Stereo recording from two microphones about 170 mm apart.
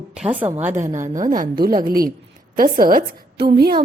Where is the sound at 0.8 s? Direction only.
45° right (ahead or behind); by 3.8 s 70° right (ahead or behind).